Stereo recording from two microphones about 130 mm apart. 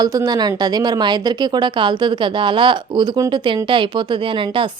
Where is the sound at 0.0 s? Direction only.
30° right (ahead or behind).